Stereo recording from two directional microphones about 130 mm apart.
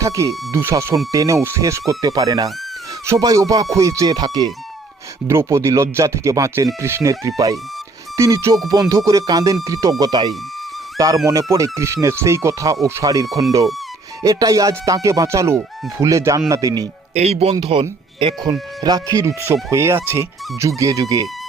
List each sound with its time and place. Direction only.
0.0 s speech: 25° right (ahead or behind)
17.2 s speech: 55° right (ahead or behind); by 21.2 s 25° right (ahead or behind)